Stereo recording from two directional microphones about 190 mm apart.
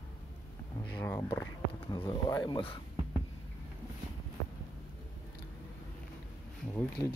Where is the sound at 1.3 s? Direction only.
25° left (ahead or behind).